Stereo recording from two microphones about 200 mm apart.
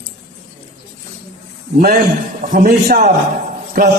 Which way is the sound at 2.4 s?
40° right (ahead or behind).